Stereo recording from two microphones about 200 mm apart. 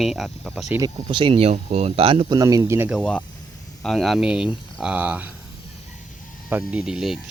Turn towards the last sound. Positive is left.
turn(degrees=0)  # may be behind; listen again after turning